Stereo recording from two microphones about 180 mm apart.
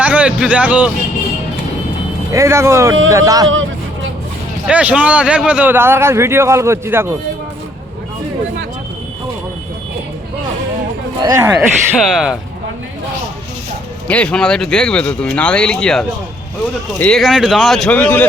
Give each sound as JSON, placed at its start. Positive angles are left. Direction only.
{"t": 0.0, "sound": "speech", "side_deg": -5}
{"t": 2.3, "sound": "a man's voice", "side_deg": -15}
{"t": 4.6, "sound": "a man's voice", "side_deg": -5}
{"t": 11.2, "sound": "a man's voice", "side_deg": -20}
{"t": 11.9, "sound": "speech", "side_deg": -5}
{"t": 14.1, "sound": "speech", "side_deg": 5}